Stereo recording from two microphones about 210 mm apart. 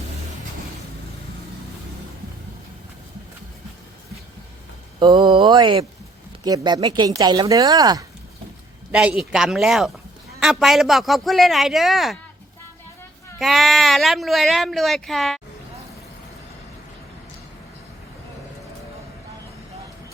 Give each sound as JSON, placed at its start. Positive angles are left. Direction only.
{"t": 4.9, "sound": "speech", "side_deg": -20}
{"t": 8.9, "sound": "speech", "side_deg": -5}
{"t": 13.4, "sound": "speech", "side_deg": 0}